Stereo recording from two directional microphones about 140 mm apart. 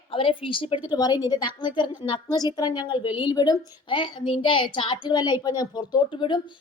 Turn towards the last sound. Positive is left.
turn(degrees=30)  # may be behind; listen again after turning